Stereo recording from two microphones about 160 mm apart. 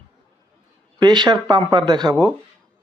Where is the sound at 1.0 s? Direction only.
25° right (ahead or behind).